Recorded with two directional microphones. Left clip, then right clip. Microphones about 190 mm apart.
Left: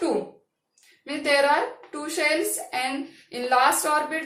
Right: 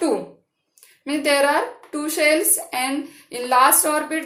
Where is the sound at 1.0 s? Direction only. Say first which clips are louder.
Right 3 dB; 45° right (ahead or behind).